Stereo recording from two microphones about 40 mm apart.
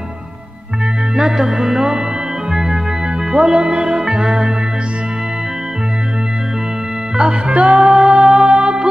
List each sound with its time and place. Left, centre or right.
1.1 s music: centre
3.3 s speech: centre
7.2 s music: right
7.9 s music: centre